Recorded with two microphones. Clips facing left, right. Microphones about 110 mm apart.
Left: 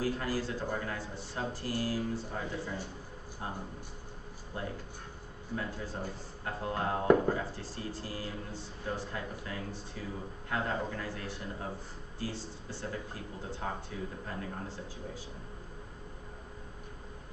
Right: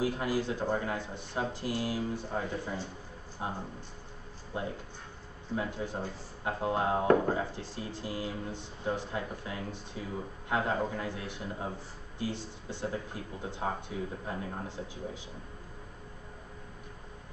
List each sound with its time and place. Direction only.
0.0 s speech: 15° right (ahead or behind)